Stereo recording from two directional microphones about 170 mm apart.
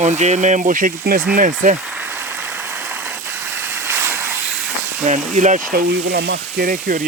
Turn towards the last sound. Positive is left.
turn(degrees=-55)  # may be behind; listen again after turning